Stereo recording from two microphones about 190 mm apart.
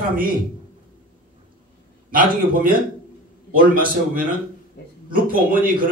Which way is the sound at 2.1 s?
45° right (ahead or behind).